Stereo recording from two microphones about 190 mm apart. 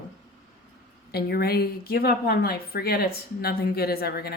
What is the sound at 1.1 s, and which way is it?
A woman's voice, 55° left (ahead or behind).